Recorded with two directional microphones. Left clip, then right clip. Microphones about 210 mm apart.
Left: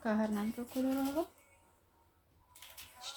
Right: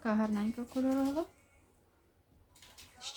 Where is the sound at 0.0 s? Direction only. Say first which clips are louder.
Right 1 dB; centre (ahead or behind).